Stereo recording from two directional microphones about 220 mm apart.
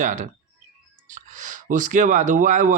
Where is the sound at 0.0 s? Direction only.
35° right (ahead or behind).